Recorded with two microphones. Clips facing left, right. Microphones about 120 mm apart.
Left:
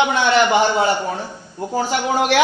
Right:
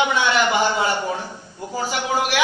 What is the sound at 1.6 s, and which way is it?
Speech, 45° left (ahead or behind).